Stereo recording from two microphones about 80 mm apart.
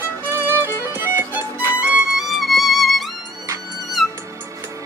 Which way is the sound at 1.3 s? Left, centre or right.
Centre.